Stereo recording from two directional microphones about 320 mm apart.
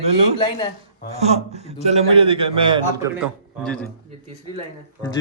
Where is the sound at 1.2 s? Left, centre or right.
Centre.